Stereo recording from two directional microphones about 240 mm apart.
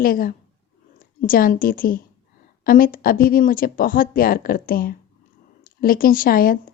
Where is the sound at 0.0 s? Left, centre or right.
Left.